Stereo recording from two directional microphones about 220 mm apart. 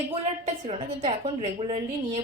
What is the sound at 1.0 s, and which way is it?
Speech, 25° right (ahead or behind).